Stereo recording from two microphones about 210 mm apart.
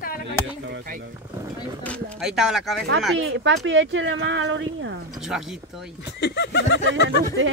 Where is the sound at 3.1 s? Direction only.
65° right (ahead or behind).